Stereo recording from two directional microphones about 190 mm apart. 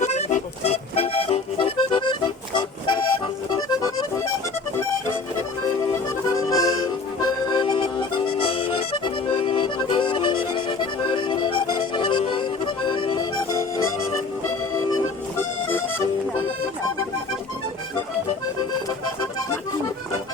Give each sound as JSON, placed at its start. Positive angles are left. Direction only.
{"t": 0.0, "sound": "music", "side_deg": 35}
{"t": 6.5, "sound": "music", "side_deg": 20}